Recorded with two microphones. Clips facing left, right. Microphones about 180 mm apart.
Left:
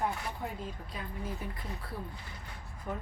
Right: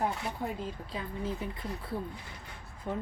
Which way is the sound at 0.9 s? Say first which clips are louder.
Right 6 dB; 25° right (ahead or behind).